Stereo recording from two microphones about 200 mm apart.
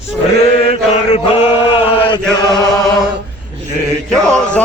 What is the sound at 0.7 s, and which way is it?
Mantra, 30° left (ahead or behind).